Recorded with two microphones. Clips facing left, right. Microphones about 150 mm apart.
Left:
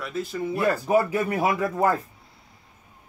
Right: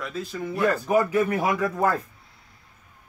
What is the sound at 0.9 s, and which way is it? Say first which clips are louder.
Speech: right 1 dB; 30° left (ahead or behind).